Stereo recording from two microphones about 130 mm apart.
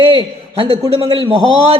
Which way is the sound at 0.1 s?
40° right (ahead or behind).